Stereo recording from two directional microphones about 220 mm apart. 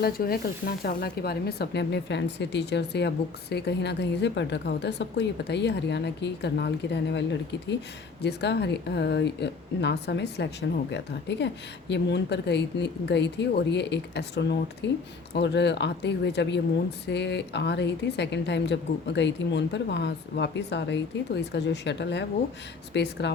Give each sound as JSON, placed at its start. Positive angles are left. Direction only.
{"t": 0.0, "sound": "a woman's voice", "side_deg": 45}